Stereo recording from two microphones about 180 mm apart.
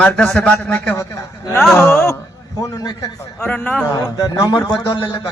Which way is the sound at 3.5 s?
5° left (ahead or behind).